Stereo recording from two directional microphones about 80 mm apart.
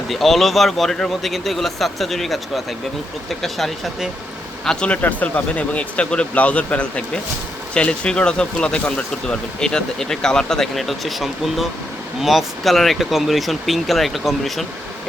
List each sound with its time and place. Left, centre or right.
0.1 s speech: centre